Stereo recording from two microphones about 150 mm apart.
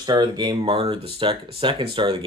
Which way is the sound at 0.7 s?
40° right (ahead or behind).